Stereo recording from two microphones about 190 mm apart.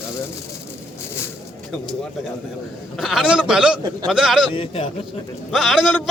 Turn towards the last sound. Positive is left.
turn(degrees=0)  # may be behind; listen again after turning